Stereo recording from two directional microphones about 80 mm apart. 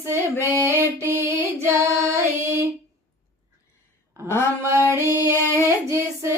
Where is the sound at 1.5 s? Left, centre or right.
Right.